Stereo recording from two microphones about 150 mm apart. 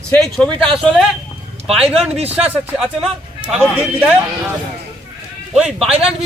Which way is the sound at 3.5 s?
5° right (ahead or behind).